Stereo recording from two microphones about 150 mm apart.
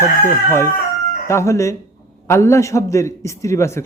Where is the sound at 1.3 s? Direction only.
20° left (ahead or behind).